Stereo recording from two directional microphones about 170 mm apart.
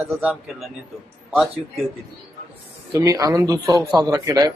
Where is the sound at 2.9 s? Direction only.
20° right (ahead or behind).